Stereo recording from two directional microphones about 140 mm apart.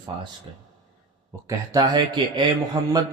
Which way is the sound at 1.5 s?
30° right (ahead or behind).